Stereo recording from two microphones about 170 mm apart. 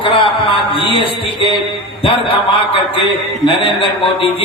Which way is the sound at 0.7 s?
30° left (ahead or behind).